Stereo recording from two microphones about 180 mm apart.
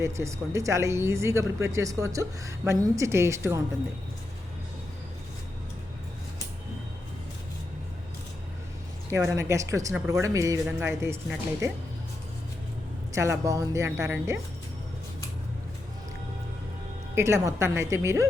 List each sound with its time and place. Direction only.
0.0 s speech: 15° right (ahead or behind)
9.0 s speech: 15° right (ahead or behind)
13.1 s speech: 15° right (ahead or behind)
17.2 s speech: 15° right (ahead or behind)